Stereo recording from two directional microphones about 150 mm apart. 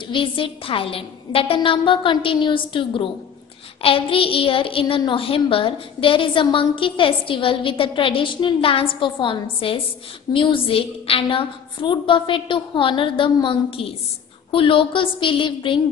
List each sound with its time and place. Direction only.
0.0 s a woman's voice: 35° left (ahead or behind)